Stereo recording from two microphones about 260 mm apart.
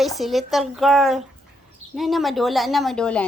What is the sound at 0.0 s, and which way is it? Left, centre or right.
A woman's voice, centre.